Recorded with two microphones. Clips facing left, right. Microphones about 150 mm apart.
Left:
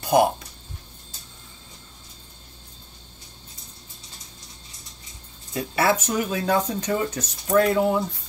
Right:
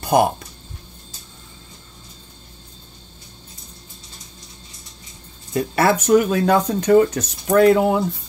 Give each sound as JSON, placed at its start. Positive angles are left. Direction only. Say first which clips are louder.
{"t": 5.5, "sound": "speech", "louder": "right 4 dB", "side_deg": -55}